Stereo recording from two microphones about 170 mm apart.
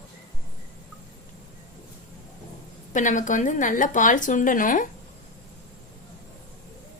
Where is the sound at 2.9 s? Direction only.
50° left (ahead or behind).